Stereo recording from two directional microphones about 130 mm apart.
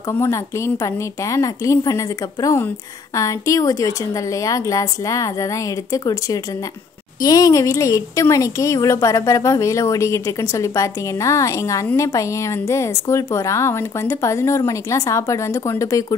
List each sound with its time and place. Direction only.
0.1 s speech: 20° left (ahead or behind)